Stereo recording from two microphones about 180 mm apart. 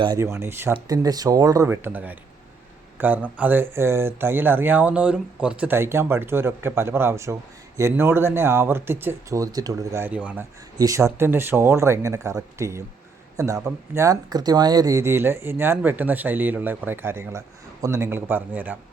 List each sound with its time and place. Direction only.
0.0 s speech: 20° right (ahead or behind)
10.8 s speech: 20° right (ahead or behind)